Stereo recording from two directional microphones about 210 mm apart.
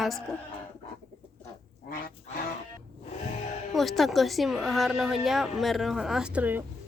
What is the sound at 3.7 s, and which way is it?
A woman's voice, centre (ahead or behind).